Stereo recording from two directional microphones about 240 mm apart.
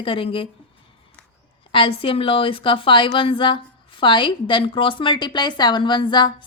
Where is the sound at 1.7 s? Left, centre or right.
Left.